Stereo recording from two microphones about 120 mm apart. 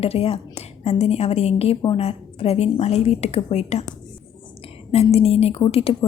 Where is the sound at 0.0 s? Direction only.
55° left (ahead or behind).